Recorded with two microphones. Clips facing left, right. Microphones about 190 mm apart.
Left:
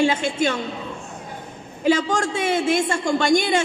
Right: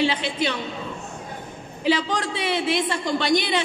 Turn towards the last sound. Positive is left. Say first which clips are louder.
# left 3 dB
turn(degrees=45)  # may be behind; listen again after turning